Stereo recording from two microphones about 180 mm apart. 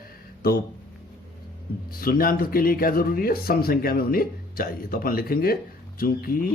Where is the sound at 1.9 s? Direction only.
55° left (ahead or behind).